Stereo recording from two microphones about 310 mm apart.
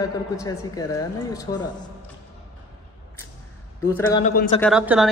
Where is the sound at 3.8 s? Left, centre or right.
Centre.